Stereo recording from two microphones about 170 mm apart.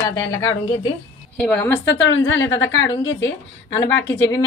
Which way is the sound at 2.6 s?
90° left.